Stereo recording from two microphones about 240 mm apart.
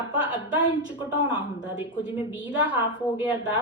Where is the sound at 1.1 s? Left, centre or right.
Left.